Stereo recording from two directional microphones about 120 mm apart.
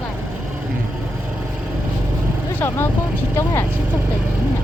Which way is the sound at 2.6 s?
20° left (ahead or behind).